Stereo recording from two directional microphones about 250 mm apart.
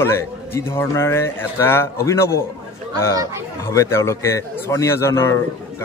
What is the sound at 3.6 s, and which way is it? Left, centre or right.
A man's voice, centre.